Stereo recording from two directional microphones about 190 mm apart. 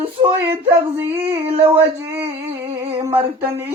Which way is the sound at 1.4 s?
30° right (ahead or behind).